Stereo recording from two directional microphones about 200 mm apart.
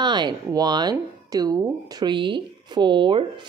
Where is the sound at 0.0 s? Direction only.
20° right (ahead or behind).